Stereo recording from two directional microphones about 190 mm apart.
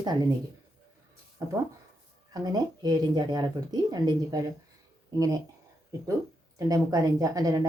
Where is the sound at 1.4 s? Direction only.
15° right (ahead or behind).